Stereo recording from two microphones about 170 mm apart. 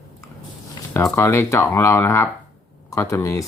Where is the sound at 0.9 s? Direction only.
15° left (ahead or behind).